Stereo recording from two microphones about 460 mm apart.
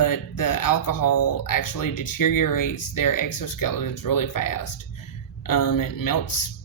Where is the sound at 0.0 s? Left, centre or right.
Left.